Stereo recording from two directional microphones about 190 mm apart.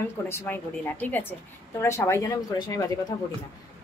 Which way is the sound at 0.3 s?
10° left (ahead or behind).